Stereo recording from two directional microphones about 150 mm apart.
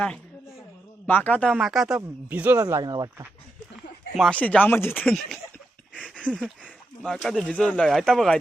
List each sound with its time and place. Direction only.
1.0 s speech: 10° left (ahead or behind)
1.5 s speech: centre (ahead or behind)
2.0 s speech: 10° right (ahead or behind)
4.1 s speech: 5° left (ahead or behind)
5.9 s a sound: 5° right (ahead or behind)
6.2 s speech: 5° left (ahead or behind)